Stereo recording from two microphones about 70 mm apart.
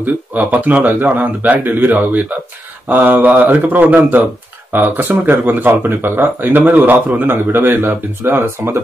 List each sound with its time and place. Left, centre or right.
0.0 s speech: right